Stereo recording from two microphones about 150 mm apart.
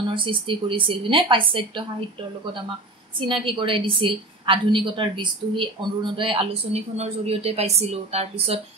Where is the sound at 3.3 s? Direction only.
35° right (ahead or behind).